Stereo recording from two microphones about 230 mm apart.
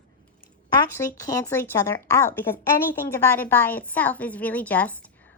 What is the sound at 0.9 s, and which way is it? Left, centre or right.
A woman's voice, centre.